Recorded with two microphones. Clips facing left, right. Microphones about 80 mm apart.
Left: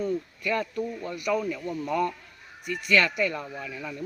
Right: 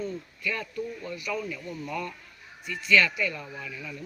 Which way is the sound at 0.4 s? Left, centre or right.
Left.